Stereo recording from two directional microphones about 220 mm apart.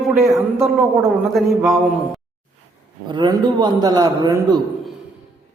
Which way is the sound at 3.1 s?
20° right (ahead or behind).